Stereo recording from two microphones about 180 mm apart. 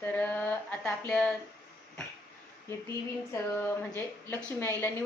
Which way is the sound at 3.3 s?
10° left (ahead or behind).